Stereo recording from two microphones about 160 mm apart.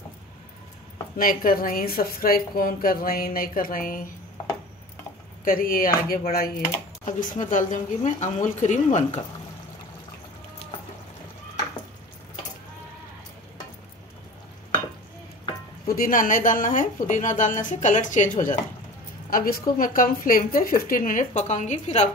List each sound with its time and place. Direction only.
1.1 s a woman's voice: 60° left (ahead or behind)
5.4 s a woman's voice: 65° left (ahead or behind)
7.1 s a woman's voice: 55° left (ahead or behind)
16.0 s a woman's voice: 55° left (ahead or behind)